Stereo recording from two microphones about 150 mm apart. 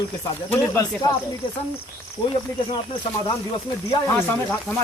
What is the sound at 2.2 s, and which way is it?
Speech, 35° left (ahead or behind).